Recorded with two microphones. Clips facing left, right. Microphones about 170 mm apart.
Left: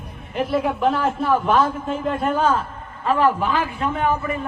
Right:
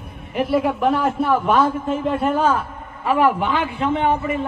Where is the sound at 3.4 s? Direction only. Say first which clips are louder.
Right 1 dB; 25° right (ahead or behind).